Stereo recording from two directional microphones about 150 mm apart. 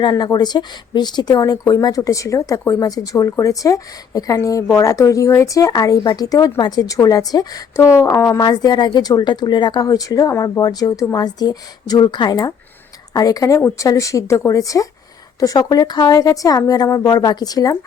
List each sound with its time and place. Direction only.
0.0 s speech: 30° left (ahead or behind)